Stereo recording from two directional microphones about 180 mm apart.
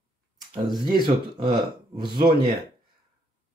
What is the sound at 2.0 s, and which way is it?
Speech, 25° right (ahead or behind).